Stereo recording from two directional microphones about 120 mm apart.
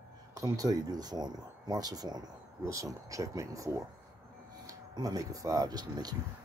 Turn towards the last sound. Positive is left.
turn(degrees=-35)  # may be behind; listen again after turning